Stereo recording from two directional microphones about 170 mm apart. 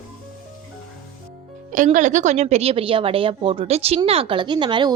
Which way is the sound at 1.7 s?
45° right (ahead or behind).